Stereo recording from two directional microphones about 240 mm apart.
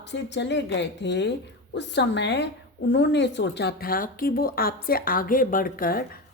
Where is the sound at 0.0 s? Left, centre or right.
Left.